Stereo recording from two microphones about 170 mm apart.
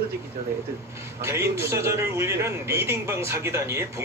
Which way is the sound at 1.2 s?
15° right (ahead or behind).